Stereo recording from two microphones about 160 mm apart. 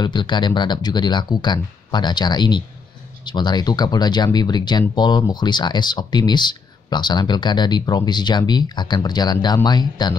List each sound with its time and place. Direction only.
0.0 s speech: 30° left (ahead or behind)